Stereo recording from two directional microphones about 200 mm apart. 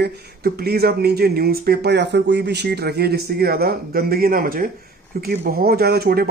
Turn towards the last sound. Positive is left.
turn(degrees=-50)  # may be behind; listen again after turning